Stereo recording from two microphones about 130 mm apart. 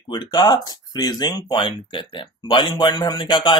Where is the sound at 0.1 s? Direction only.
30° left (ahead or behind).